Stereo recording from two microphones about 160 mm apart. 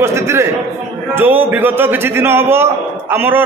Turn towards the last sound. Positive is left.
turn(degrees=-15)  # may be behind; listen again after turning